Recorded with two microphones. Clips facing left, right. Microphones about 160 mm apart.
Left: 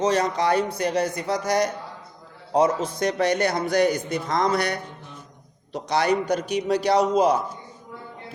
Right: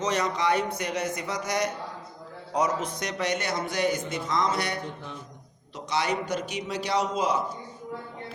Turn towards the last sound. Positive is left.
turn(degrees=60)  # may be behind; listen again after turning